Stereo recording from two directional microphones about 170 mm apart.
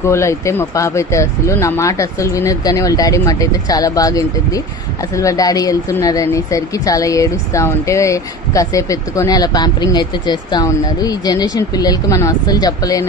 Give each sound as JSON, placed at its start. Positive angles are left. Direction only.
{"t": 0.0, "sound": "speech", "side_deg": 15}